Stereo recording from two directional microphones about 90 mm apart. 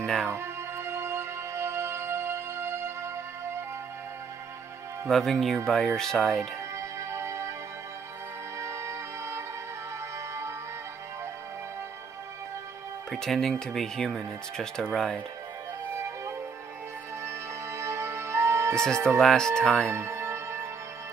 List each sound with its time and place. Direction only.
0.0 s music: 10° left (ahead or behind)
0.3 s music: 30° right (ahead or behind)
5.0 s speech: centre (ahead or behind)
6.7 s music: 30° right (ahead or behind)
8.5 s music: 30° right (ahead or behind)
13.1 s speech: 5° left (ahead or behind)
15.9 s music: 30° right (ahead or behind)
19.0 s speech: 5° left (ahead or behind)
19.9 s music: 30° right (ahead or behind)